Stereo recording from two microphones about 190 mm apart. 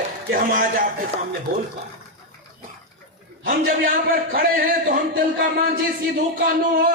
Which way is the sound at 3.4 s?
50° right (ahead or behind).